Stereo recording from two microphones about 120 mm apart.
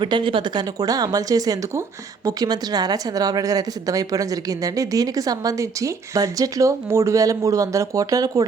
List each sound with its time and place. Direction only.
0.0 s a woman's voice: 45° right (ahead or behind)